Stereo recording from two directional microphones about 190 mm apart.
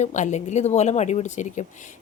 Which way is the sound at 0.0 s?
40° left (ahead or behind).